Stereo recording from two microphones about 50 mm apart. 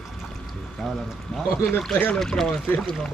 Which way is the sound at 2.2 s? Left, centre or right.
Centre.